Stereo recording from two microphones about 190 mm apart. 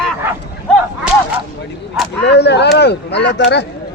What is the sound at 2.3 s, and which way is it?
Speech, 60° left (ahead or behind).